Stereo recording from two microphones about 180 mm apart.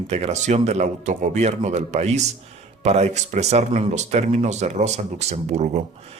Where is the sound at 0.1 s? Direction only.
35° right (ahead or behind).